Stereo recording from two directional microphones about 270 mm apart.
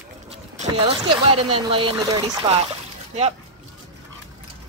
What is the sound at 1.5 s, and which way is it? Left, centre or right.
Speech, centre.